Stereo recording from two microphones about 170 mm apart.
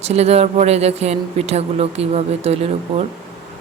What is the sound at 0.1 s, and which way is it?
Speech, 40° right (ahead or behind).